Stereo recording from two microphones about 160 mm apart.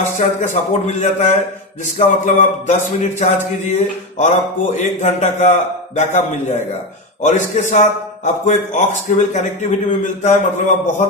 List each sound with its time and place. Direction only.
0.1 s a man's voice: 50° left (ahead or behind)